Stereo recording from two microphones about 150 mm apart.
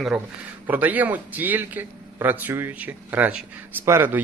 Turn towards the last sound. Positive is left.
turn(degrees=-15)  # may be behind; listen again after turning